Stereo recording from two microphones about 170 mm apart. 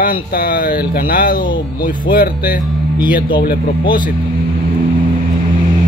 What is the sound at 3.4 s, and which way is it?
Speech, 60° left (ahead or behind).